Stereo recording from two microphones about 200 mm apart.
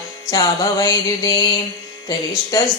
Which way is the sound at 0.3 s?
15° left (ahead or behind).